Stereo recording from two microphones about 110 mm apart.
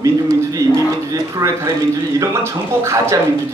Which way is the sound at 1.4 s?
30° right (ahead or behind).